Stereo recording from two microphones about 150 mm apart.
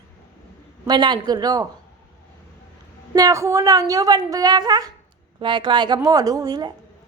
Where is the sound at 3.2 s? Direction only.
20° right (ahead or behind).